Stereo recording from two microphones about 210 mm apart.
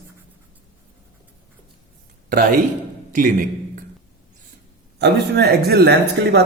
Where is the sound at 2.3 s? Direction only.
40° right (ahead or behind).